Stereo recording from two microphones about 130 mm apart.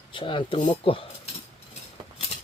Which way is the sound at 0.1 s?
40° left (ahead or behind).